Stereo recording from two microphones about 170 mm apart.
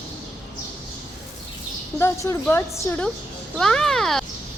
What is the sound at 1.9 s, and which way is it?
A woman's voice, 15° left (ahead or behind).